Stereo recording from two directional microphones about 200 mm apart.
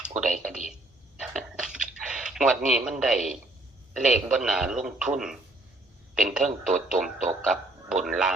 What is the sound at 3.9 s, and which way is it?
Speech, centre (ahead or behind).